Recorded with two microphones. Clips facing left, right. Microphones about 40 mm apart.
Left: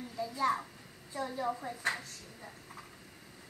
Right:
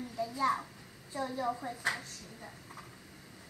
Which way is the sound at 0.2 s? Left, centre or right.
Left.